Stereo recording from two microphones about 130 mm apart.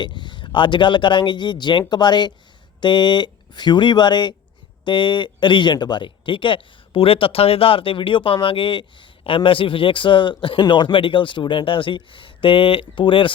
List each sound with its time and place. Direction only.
0.0 s speech: 35° left (ahead or behind)